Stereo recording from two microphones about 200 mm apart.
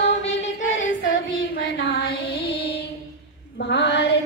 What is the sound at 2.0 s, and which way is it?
Female singing, 55° left (ahead or behind).